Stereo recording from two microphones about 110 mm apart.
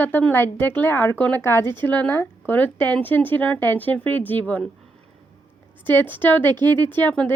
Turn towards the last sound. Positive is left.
turn(degrees=15)  # may be behind; listen again after turning